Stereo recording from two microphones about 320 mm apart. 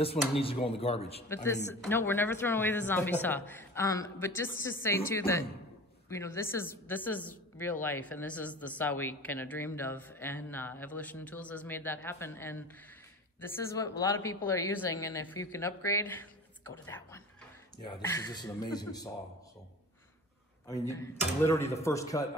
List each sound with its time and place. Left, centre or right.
0.0 s speech: centre
1.8 s a woman's voice: centre
20.6 s speech: centre